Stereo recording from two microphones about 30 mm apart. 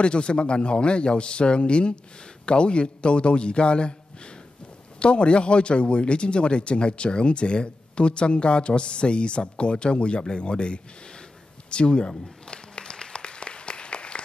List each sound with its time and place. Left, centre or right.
0.0 s a man's voice: left
12.7 s applause: left